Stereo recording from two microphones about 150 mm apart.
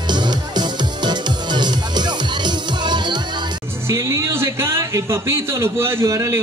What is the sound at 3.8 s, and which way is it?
A man's voice, 20° right (ahead or behind).